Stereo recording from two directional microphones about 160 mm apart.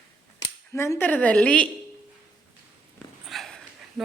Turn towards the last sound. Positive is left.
turn(degrees=0)  # may be behind; listen again after turning